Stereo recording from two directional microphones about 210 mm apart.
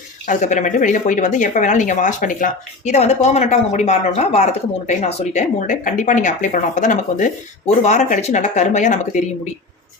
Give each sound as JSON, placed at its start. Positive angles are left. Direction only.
{"t": 0.3, "sound": "speech", "side_deg": 35}